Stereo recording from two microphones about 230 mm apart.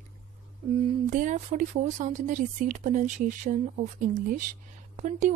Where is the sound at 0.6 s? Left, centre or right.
Right.